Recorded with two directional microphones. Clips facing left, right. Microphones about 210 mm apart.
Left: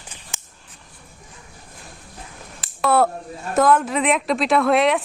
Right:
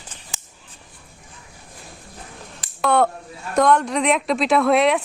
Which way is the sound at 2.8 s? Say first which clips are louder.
Even; 5° left (ahead or behind).